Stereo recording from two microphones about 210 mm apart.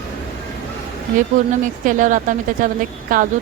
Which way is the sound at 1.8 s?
40° right (ahead or behind).